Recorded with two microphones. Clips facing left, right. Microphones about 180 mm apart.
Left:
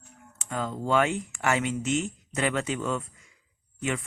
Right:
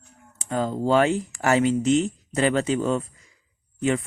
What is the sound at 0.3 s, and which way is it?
Speech, 35° right (ahead or behind).